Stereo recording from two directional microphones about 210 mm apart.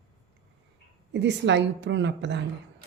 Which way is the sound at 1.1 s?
55° right (ahead or behind).